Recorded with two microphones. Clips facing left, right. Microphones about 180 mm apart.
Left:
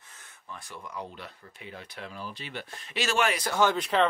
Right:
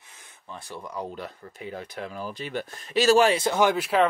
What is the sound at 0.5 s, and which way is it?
Speech, 35° right (ahead or behind).